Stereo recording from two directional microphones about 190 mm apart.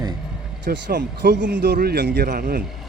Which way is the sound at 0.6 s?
65° right (ahead or behind).